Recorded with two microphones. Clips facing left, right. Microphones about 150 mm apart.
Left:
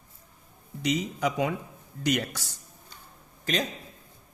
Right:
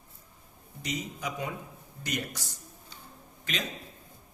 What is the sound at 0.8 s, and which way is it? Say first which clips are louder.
Speech: left 9 dB; 90° left.